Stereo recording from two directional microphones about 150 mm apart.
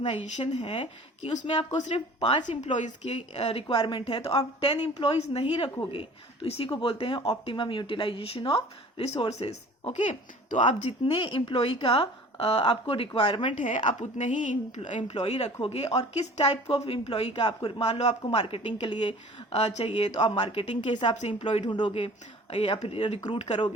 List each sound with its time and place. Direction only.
0.3 s a woman's voice: 50° left (ahead or behind)
11.0 s speech: 35° left (ahead or behind)
13.6 s a woman's voice: 55° left (ahead or behind); by 21.2 s 35° left (ahead or behind)
21.2 s a woman's voice: 45° left (ahead or behind)
21.7 s a woman's voice: 30° left (ahead or behind); by 23.6 s 45° left (ahead or behind)